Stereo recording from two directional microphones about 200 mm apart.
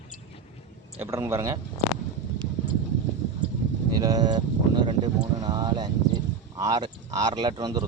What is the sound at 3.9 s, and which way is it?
Speech, 20° right (ahead or behind).